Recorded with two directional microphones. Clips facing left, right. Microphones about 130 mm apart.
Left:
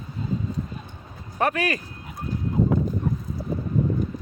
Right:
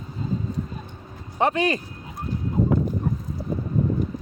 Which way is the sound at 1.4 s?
25° right (ahead or behind).